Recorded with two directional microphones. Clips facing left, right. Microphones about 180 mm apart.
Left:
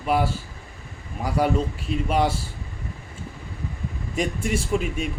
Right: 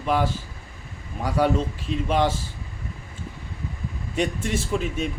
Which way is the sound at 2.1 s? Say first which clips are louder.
Even; 10° left (ahead or behind).